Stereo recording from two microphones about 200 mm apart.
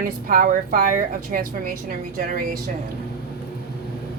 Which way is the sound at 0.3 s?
45° right (ahead or behind).